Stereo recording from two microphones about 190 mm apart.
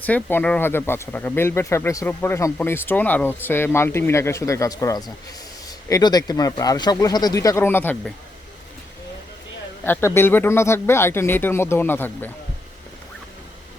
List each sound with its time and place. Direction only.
0.0 s speech: 10° left (ahead or behind)
9.8 s speech: 10° left (ahead or behind)